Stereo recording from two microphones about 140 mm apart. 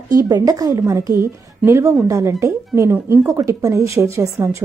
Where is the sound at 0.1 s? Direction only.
25° right (ahead or behind).